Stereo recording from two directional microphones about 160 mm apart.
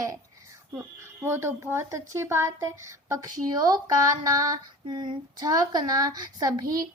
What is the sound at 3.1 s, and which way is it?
Female singing, 20° right (ahead or behind).